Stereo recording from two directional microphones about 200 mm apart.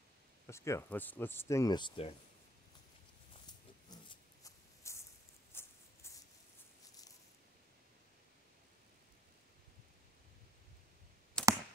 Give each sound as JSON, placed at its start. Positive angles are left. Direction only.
{"t": 0.5, "sound": "speech", "side_deg": 15}
{"t": 3.9, "sound": "a sound", "side_deg": 20}
{"t": 11.4, "sound": "clicking", "side_deg": 5}